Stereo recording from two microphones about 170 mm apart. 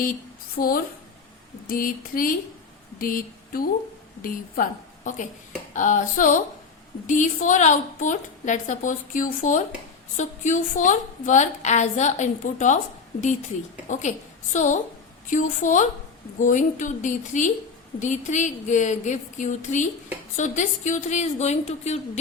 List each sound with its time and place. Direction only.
0.6 s a woman's voice: 70° left (ahead or behind)
1.6 s a sound: 55° left (ahead or behind)
3.0 s a woman's voice: 55° left (ahead or behind)
13.8 s a woman's voice: 45° left (ahead or behind)